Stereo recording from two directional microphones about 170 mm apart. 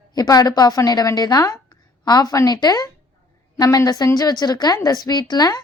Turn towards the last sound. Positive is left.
turn(degrees=25)  # may be behind; listen again after turning